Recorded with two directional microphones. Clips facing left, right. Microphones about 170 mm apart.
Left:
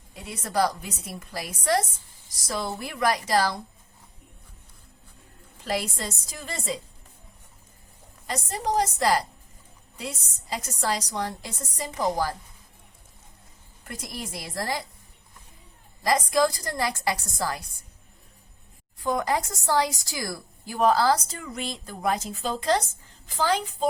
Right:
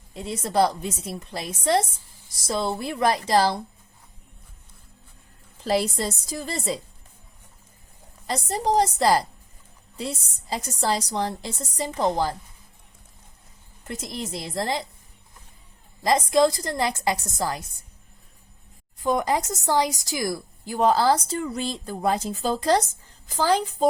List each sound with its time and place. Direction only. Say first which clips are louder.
0.1 s speech: right 5 dB; 25° right (ahead or behind)
5.6 s a woman's voice: right 6 dB; 30° right (ahead or behind)
8.3 s a woman's voice: right 4 dB; 30° right (ahead or behind)
13.8 s speech: right 4 dB; 25° right (ahead or behind)
16.0 s speech: right 3 dB; 25° right (ahead or behind)
18.9 s a woman's voice: right 3 dB; 20° right (ahead or behind); by 23.6 s 35° right (ahead or behind)